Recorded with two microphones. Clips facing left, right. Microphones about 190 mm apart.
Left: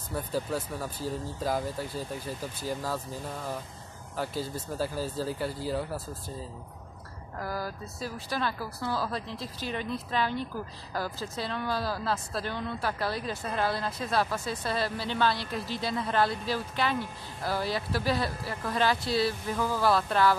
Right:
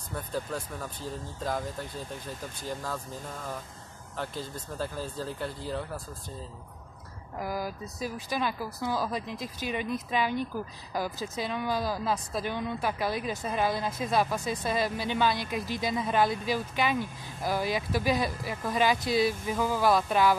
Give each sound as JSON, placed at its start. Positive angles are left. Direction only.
{"t": 0.1, "sound": "speech", "side_deg": 5}
{"t": 4.2, "sound": "speech", "side_deg": 5}
{"t": 7.3, "sound": "speech", "side_deg": -15}